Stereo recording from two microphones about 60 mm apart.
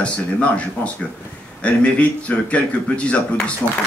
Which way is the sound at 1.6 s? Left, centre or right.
Left.